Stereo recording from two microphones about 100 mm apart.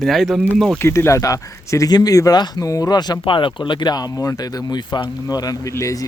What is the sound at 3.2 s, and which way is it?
Speech, 55° left (ahead or behind).